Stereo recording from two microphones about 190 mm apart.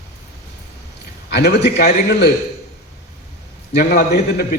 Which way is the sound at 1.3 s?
60° left (ahead or behind).